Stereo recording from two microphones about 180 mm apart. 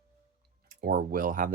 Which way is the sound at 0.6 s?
55° right (ahead or behind).